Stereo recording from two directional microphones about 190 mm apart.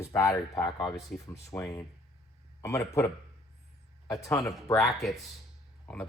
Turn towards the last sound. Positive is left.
turn(degrees=5)  # may be behind; listen again after turning